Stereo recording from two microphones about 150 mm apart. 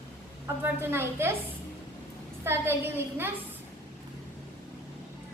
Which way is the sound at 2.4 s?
15° right (ahead or behind).